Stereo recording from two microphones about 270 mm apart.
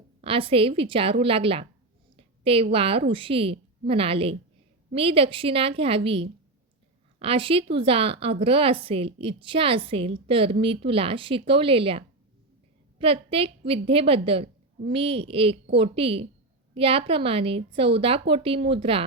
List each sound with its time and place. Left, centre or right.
0.2 s a woman's voice: centre